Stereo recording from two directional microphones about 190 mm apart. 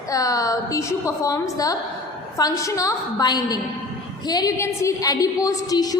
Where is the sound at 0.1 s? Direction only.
20° left (ahead or behind).